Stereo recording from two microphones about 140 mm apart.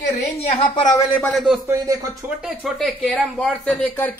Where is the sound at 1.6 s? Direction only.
20° right (ahead or behind).